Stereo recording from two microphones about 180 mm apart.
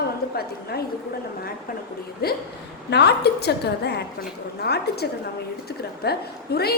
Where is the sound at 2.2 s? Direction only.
60° left (ahead or behind).